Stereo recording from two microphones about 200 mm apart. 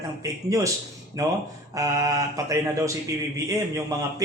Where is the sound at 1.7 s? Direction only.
15° right (ahead or behind).